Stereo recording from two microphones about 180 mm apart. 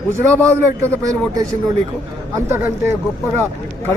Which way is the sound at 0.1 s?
15° right (ahead or behind).